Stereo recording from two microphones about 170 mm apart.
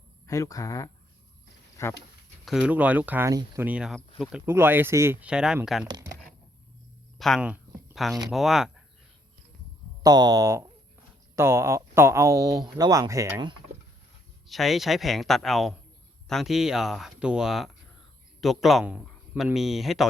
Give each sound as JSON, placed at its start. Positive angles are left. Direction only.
{"t": 0.3, "sound": "speech", "side_deg": 20}
{"t": 2.4, "sound": "speech", "side_deg": -5}
{"t": 3.7, "sound": "speech", "side_deg": -5}
{"t": 7.2, "sound": "speech", "side_deg": 0}
{"t": 7.5, "sound": "a sound", "side_deg": 0}
{"t": 8.3, "sound": "speech", "side_deg": 0}
{"t": 10.0, "sound": "speech", "side_deg": -25}
{"t": 14.4, "sound": "speech", "side_deg": 0}